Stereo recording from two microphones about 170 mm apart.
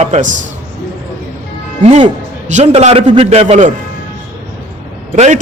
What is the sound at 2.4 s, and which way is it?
A man's voice, 40° right (ahead or behind).